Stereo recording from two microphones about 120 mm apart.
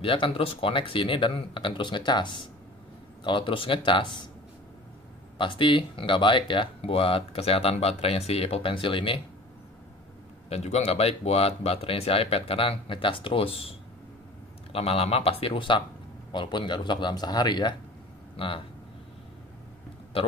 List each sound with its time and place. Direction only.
0.0 s speech: 50° left (ahead or behind)
5.4 s speech: 45° left (ahead or behind)
10.5 s speech: 65° left (ahead or behind); by 18.6 s 45° left (ahead or behind)